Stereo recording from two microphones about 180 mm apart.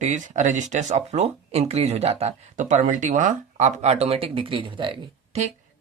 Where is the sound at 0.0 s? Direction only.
45° right (ahead or behind).